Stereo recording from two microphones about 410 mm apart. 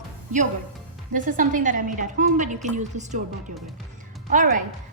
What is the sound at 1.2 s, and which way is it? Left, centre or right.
A woman's voice, centre.